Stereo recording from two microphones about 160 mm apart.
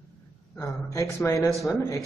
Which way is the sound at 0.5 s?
20° left (ahead or behind).